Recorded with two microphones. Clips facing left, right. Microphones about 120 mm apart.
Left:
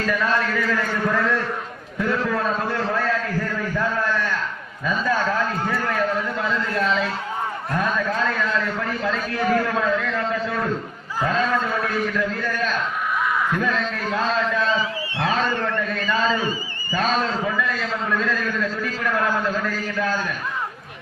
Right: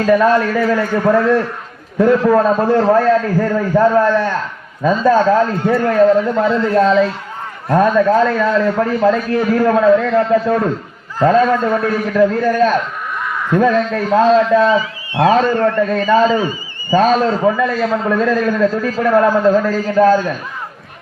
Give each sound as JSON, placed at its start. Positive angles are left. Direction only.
{"t": 0.0, "sound": "a man's voice", "side_deg": -40}
{"t": 2.0, "sound": "a man's voice", "side_deg": -40}